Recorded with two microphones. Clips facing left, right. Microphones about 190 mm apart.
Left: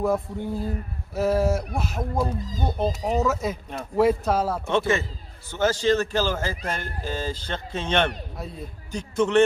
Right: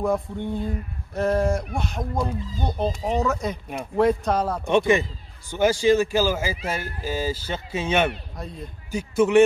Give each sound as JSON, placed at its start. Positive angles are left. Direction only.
{"t": 0.0, "sound": "speech", "side_deg": 5}
{"t": 4.6, "sound": "speech", "side_deg": -15}
{"t": 8.4, "sound": "speech", "side_deg": 5}
{"t": 8.9, "sound": "speech", "side_deg": -10}